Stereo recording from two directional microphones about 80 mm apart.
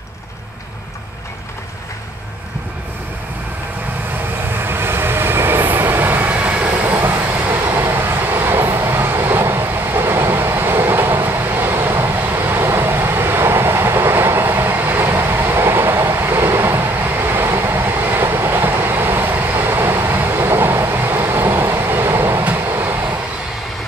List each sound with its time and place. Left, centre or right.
4.6 s train: right